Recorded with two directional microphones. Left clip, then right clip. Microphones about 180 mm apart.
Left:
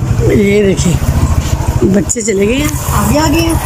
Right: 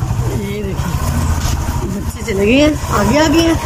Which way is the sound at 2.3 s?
25° left (ahead or behind).